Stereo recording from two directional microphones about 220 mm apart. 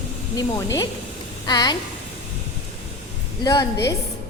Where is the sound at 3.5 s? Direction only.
15° left (ahead or behind).